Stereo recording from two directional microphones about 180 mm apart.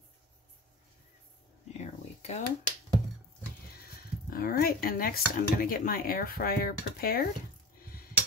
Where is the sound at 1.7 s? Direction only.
40° left (ahead or behind).